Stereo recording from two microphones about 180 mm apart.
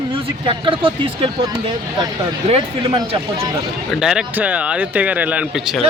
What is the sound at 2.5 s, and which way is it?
A man's voice, 30° right (ahead or behind).